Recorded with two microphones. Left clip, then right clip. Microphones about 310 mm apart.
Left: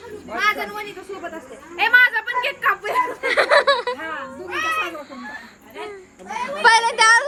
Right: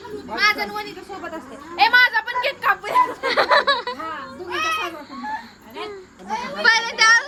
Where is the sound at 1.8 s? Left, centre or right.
Right.